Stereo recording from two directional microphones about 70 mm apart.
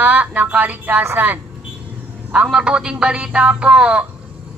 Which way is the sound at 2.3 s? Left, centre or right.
Centre.